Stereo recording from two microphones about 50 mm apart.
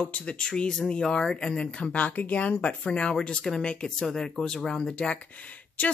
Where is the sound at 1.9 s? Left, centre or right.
Left.